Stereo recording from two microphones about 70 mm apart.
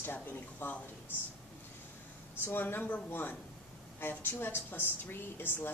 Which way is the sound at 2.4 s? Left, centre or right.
Left.